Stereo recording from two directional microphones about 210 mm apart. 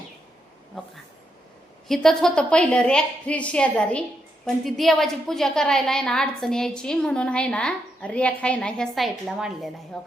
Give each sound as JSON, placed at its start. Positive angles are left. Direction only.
{"t": 1.9, "sound": "a woman's voice", "side_deg": 0}